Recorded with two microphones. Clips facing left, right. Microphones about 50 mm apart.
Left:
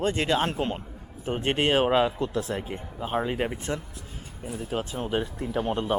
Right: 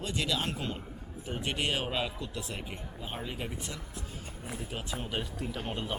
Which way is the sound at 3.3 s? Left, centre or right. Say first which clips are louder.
Left 10 dB; left.